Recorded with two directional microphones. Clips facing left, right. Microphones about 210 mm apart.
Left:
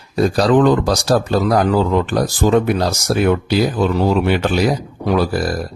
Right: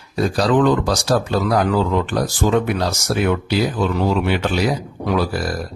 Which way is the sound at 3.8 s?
40° left (ahead or behind).